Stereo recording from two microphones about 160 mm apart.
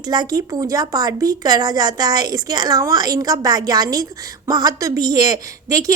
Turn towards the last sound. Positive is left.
turn(degrees=-20)  # may be behind; listen again after turning